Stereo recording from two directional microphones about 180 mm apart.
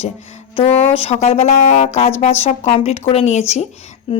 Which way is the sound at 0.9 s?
35° left (ahead or behind).